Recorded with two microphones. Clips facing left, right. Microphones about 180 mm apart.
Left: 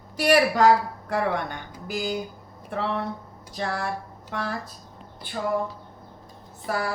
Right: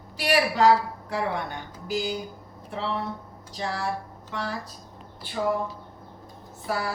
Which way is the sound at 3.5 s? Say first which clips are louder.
Left 1 dB; 55° left (ahead or behind).